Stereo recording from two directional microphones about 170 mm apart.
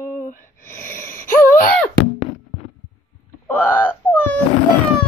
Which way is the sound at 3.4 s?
10° left (ahead or behind).